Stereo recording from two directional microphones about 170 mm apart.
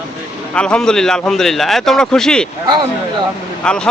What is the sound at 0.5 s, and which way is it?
Speech, 5° left (ahead or behind).